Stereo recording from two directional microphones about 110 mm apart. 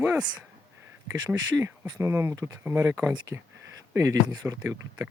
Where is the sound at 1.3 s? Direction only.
20° right (ahead or behind).